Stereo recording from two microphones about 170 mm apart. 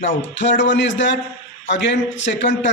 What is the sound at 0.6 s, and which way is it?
A man's voice, 90° left.